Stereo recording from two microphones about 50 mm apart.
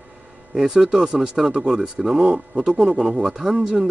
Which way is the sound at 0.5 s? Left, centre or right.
Centre.